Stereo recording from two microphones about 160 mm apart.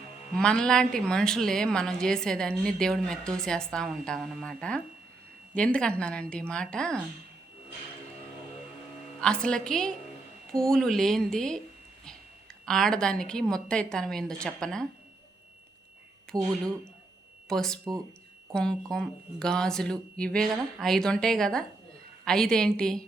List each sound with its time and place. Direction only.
0.3 s a woman's voice: 5° left (ahead or behind)
9.2 s a woman's voice: 5° left (ahead or behind)
12.6 s a woman's voice: 5° left (ahead or behind)
16.3 s speech: 25° right (ahead or behind)
17.5 s a woman's voice: 5° left (ahead or behind)